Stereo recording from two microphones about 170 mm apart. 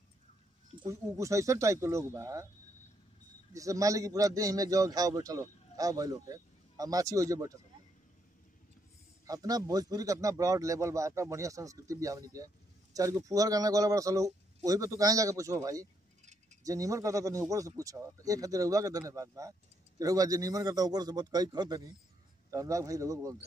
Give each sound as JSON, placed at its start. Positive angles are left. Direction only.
{"t": 0.8, "sound": "speech", "side_deg": -20}
{"t": 3.5, "sound": "a man's voice", "side_deg": -20}
{"t": 9.2, "sound": "a man's voice", "side_deg": -20}